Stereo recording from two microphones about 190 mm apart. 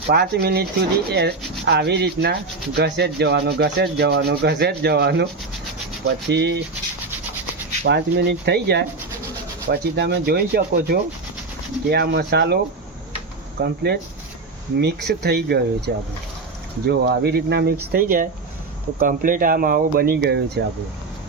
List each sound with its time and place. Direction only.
0.1 s rub: 55° right (ahead or behind)
6.3 s rub: 65° right (ahead or behind)
7.9 s rub: 65° right (ahead or behind)
13.6 s rub: 60° right (ahead or behind)
18.9 s speech: 45° right (ahead or behind)